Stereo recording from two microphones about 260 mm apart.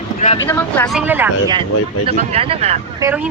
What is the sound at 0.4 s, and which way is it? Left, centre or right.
Speech, centre.